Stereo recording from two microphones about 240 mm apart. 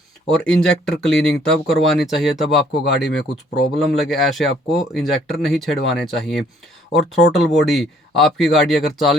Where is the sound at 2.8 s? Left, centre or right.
Left.